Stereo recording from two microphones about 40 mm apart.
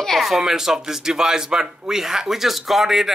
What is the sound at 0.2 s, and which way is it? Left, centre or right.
Speech, centre.